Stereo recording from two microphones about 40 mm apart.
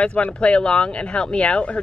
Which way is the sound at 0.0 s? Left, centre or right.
Left.